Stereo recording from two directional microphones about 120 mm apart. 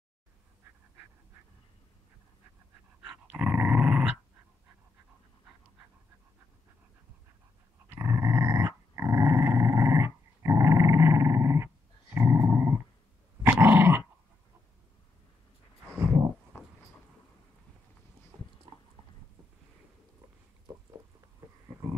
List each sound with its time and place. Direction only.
3.0 s dog: 15° right (ahead or behind)
7.9 s dog: 25° right (ahead or behind)
16.0 s a sound: 25° right (ahead or behind)